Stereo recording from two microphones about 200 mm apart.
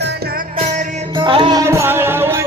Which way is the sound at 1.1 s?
25° right (ahead or behind).